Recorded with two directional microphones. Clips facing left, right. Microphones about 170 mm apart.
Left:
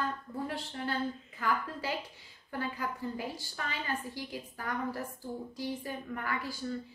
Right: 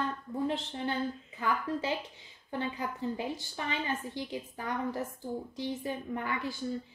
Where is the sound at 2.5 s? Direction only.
20° right (ahead or behind).